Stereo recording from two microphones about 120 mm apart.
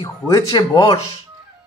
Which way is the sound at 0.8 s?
55° left (ahead or behind).